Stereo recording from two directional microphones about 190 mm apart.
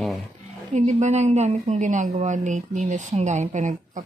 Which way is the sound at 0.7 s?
35° right (ahead or behind).